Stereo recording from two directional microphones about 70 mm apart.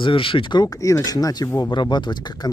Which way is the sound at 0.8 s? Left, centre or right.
Left.